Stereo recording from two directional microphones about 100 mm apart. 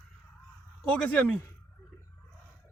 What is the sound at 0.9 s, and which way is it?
Speech, 15° left (ahead or behind).